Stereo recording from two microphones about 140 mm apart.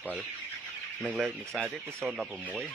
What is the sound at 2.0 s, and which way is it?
Speech, 5° right (ahead or behind).